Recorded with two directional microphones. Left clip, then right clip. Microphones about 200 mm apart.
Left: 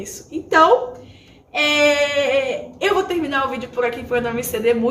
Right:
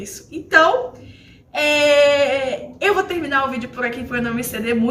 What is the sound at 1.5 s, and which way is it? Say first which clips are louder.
Speech: right 1 dB; 15° right (ahead or behind).